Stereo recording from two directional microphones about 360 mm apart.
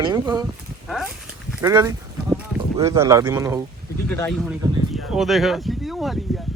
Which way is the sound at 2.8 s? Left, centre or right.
Centre.